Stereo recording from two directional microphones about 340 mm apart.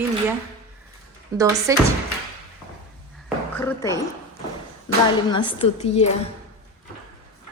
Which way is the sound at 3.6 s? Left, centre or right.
Centre.